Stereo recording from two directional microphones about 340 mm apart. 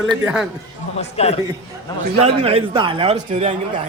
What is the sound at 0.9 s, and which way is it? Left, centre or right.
Speech, centre.